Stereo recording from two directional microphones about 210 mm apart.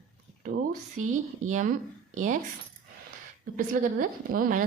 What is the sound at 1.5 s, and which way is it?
Speech, 35° right (ahead or behind).